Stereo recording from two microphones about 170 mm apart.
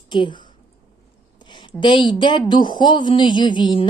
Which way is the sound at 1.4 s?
30° left (ahead or behind).